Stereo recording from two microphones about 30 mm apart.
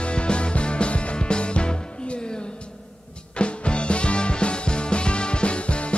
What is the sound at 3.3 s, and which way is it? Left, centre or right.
Music, left.